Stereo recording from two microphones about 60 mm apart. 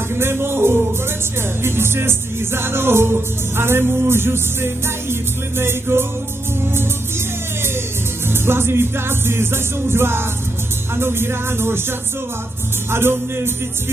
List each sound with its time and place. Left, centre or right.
0.1 s music: right
5.6 s music: right
8.3 s music: right
12.9 s music: right